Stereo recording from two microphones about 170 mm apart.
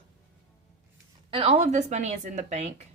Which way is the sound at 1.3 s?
35° right (ahead or behind).